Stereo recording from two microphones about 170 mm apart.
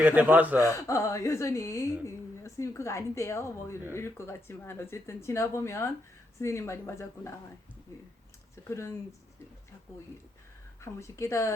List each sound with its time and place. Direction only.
0.0 s speech: 10° right (ahead or behind)
0.6 s a woman's voice: 20° left (ahead or behind)
8.6 s a woman's voice: 20° left (ahead or behind)
10.8 s a woman's voice: 15° left (ahead or behind)